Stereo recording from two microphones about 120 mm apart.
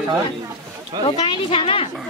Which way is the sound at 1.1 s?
45° left (ahead or behind).